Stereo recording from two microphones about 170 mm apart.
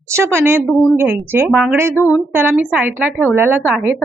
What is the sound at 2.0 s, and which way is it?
Speech, 20° left (ahead or behind).